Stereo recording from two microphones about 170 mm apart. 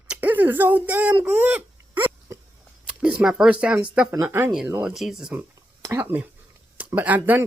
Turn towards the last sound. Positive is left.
turn(degrees=-10)  # may be behind; listen again after turning